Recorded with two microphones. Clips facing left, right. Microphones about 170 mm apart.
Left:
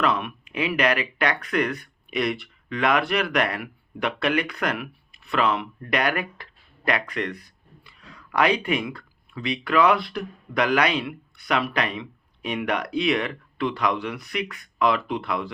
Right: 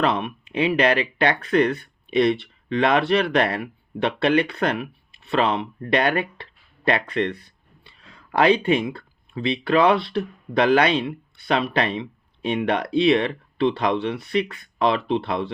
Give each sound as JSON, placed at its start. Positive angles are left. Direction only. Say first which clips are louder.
{"t": 0.0, "sound": "speech", "louder": "right 2 dB", "side_deg": -25}